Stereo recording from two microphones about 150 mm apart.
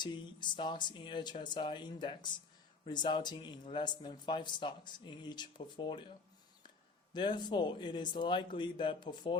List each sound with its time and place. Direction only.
0.0 s speech: 30° left (ahead or behind)
7.1 s speech: 30° left (ahead or behind)